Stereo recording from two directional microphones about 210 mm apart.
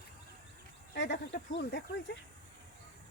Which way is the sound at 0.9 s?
55° left (ahead or behind).